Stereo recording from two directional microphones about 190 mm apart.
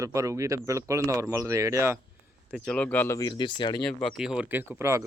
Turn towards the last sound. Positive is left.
turn(degrees=-15)  # may be behind; listen again after turning